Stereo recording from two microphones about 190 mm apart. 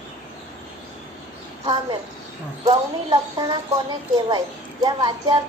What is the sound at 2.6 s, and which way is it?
Speech, 30° right (ahead or behind).